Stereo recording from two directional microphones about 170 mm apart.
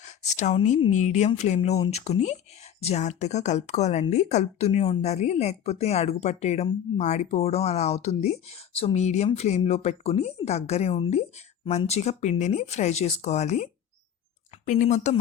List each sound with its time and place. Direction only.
0.0 s speech: 45° left (ahead or behind)